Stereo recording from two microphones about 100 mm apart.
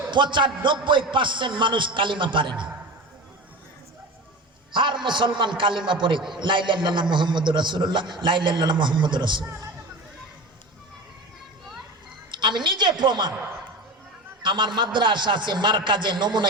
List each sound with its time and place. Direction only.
0.1 s a man's voice: 50° right (ahead or behind)
4.7 s a man's voice: 50° right (ahead or behind)
12.3 s a sound: 50° right (ahead or behind)
14.4 s a man's voice: 50° right (ahead or behind)